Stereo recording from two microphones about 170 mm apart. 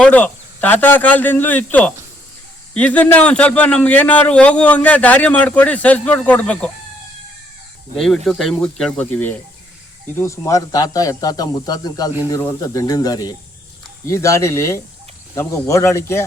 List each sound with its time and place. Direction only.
0.0 s a man's voice: 10° left (ahead or behind)
7.9 s a man's voice: centre (ahead or behind)